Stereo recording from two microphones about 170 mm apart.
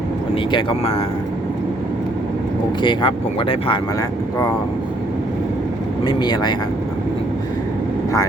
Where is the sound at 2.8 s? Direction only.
30° left (ahead or behind).